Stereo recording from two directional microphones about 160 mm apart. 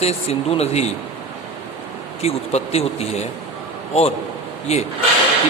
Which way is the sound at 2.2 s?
40° left (ahead or behind).